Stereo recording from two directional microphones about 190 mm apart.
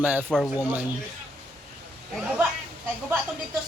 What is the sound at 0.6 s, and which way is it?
Speech, 5° right (ahead or behind).